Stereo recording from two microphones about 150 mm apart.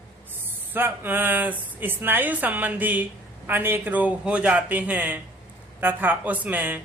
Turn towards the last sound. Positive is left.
turn(degrees=-10)  # may be behind; listen again after turning